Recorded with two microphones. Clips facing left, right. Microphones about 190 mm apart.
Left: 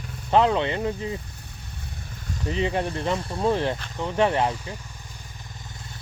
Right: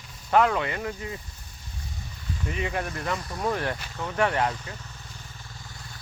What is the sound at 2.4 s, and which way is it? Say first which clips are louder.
Speech: left 5 dB; 30° left (ahead or behind).